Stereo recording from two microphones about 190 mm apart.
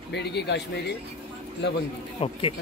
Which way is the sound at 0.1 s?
60° left (ahead or behind).